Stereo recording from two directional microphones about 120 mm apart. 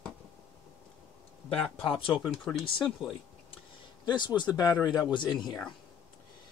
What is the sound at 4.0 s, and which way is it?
Speech, 40° left (ahead or behind).